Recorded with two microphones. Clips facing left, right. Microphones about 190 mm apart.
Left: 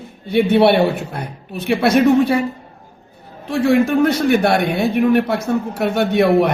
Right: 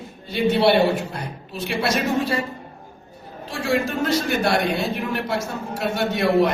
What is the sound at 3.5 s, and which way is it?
A man's voice, 60° left (ahead or behind).